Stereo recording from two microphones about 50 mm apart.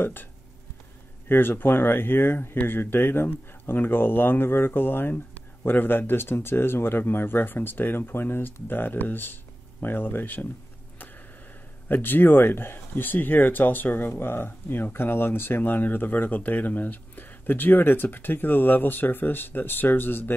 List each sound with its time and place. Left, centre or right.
0.0 s speech: left
1.3 s speech: left
11.9 s speech: left